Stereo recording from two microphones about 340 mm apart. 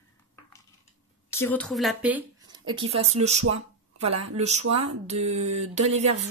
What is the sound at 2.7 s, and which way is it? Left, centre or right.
Speech, centre.